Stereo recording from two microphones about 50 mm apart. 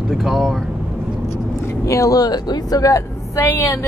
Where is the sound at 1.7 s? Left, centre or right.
Left.